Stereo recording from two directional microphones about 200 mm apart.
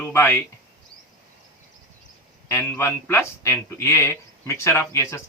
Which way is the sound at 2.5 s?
10° left (ahead or behind).